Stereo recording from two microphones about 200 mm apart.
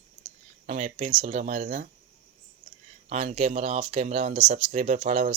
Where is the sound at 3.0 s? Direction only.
35° right (ahead or behind).